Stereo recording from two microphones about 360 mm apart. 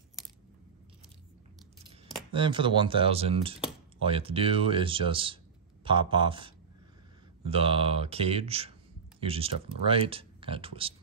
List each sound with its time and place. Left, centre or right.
0.2 s coin: centre
2.3 s speech: centre